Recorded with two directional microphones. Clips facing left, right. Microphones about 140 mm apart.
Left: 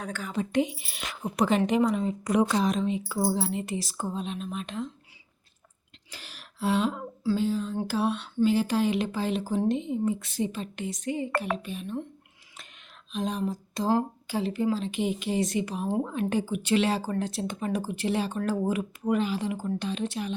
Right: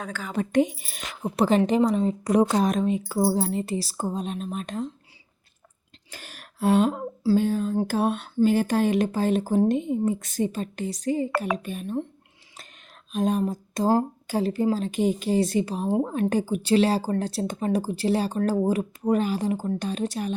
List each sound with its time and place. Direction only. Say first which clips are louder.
0.3 s speech: right 5 dB; 45° right (ahead or behind)
2.6 s speech: right 3 dB; 50° right (ahead or behind)
6.1 s speech: right 3 dB; 50° right (ahead or behind)
13.1 s speech: right 6 dB; 50° right (ahead or behind)